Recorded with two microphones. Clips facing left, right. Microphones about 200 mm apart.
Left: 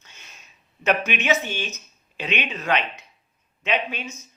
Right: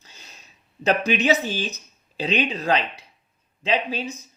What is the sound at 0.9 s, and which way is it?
Speech, 35° right (ahead or behind).